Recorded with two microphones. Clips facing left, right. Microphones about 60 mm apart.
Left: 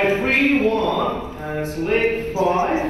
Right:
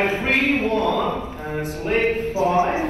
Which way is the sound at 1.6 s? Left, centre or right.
Left.